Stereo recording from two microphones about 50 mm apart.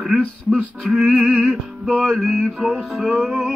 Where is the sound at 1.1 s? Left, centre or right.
Centre.